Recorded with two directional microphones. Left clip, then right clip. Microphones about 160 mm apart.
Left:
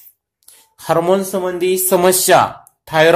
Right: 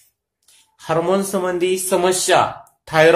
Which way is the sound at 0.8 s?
50° left (ahead or behind).